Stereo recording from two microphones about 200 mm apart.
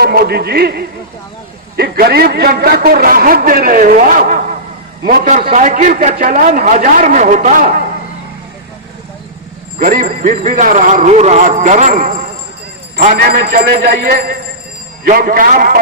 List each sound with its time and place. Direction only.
0.0 s a man's voice: 50° right (ahead or behind)
9.7 s a man's voice: 40° right (ahead or behind)